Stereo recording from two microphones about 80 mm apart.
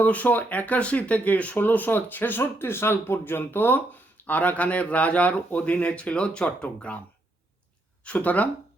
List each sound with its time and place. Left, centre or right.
0.0 s speech: left
8.0 s speech: centre